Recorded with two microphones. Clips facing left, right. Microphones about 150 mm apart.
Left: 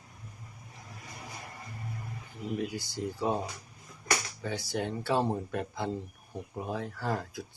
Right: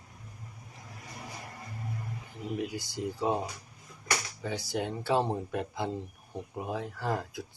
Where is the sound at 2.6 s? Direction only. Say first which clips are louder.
Right 1 dB; 15° right (ahead or behind).